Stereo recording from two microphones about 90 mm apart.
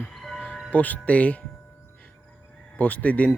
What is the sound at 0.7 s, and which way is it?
Speech, 15° left (ahead or behind).